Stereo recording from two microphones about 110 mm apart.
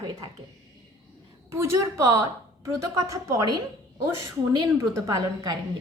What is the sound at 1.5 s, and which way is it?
A woman's voice, 25° right (ahead or behind).